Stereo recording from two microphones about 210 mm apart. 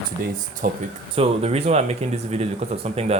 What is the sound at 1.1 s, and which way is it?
Speech, 25° right (ahead or behind).